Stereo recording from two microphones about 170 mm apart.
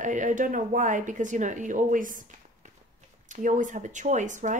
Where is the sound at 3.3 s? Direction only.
50° right (ahead or behind).